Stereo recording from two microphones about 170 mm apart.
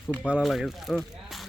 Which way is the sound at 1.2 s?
Centre (ahead or behind).